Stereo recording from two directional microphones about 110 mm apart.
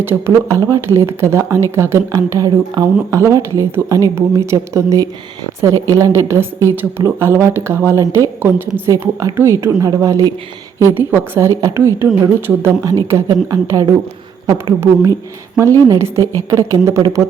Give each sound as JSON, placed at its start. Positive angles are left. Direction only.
{"t": 0.0, "sound": "speech", "side_deg": -20}